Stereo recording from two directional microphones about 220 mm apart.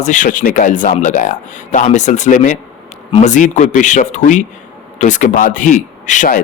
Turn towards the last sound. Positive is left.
turn(degrees=35)  # may be behind; listen again after turning